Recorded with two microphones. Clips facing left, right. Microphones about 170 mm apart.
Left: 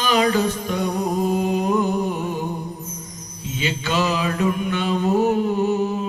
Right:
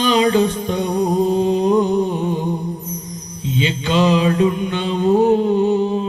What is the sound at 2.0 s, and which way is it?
Music, 20° right (ahead or behind).